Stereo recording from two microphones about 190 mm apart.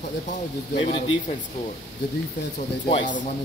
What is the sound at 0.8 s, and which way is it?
Speech, 30° left (ahead or behind).